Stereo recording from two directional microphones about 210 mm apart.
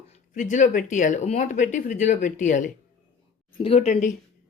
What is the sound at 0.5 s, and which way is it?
A man's voice, 40° left (ahead or behind).